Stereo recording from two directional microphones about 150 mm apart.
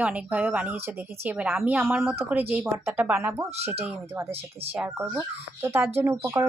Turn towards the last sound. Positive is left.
turn(degrees=-15)  # may be behind; listen again after turning